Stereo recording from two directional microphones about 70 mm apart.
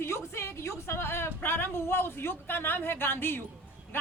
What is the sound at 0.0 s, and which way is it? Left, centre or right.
A woman's voice, left.